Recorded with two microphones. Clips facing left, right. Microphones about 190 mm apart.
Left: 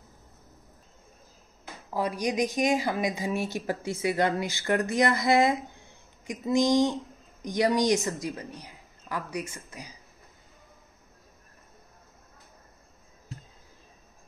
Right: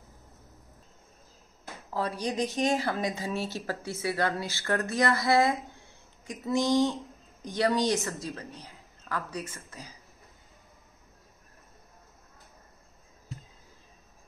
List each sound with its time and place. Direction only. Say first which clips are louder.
2.0 s a woman's voice: left 3 dB; 15° left (ahead or behind)